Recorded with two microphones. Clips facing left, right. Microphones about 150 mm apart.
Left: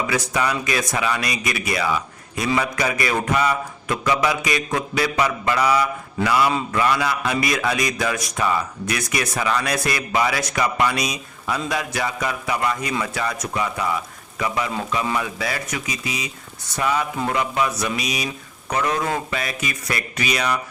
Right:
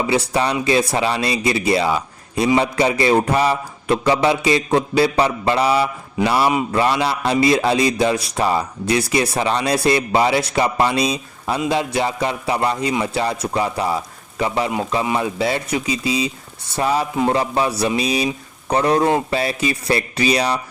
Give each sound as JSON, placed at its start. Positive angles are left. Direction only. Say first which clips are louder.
{"t": 0.1, "sound": "a man's voice", "louder": "right 4 dB", "side_deg": -30}